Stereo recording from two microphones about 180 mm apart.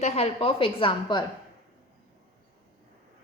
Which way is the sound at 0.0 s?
35° left (ahead or behind).